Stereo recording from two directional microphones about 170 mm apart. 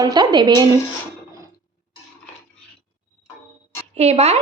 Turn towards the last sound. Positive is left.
turn(degrees=-40)  # may be behind; listen again after turning